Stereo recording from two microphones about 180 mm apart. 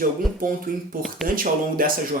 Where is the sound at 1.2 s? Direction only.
50° right (ahead or behind).